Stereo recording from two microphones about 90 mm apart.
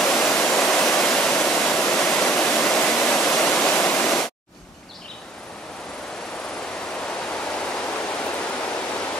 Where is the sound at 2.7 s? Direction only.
5° left (ahead or behind).